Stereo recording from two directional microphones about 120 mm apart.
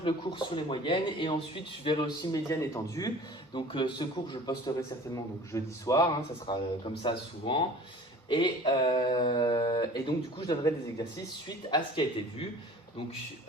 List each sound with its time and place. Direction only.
0.0 s speech: 45° left (ahead or behind)
2.3 s speech: 25° left (ahead or behind)
3.5 s a man's voice: 40° left (ahead or behind)
6.5 s a man's voice: 40° left (ahead or behind)